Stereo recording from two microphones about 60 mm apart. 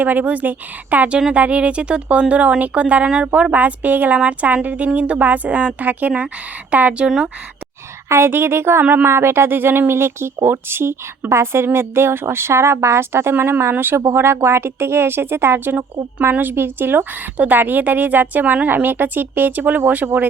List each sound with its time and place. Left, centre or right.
0.0 s speech: right
3.5 s speech: right
8.1 s speech: right
8.8 s speech: right
9.0 s a woman's voice: right
17.3 s a woman's voice: right